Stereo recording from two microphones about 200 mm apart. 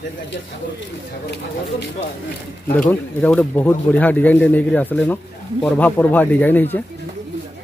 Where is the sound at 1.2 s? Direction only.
60° left (ahead or behind).